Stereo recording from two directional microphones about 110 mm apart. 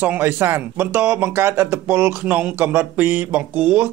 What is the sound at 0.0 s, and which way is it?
Speech, 20° right (ahead or behind).